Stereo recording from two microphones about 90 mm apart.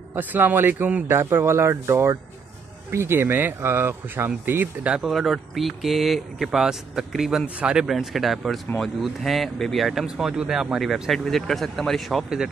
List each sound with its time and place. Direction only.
0.1 s speech: 20° right (ahead or behind)
4.9 s speech: centre (ahead or behind)